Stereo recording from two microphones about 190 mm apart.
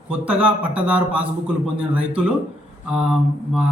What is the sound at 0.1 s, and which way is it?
A man's voice, 5° right (ahead or behind).